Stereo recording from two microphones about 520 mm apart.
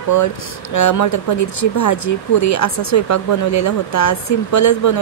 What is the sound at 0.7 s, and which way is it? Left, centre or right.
A woman's voice, left.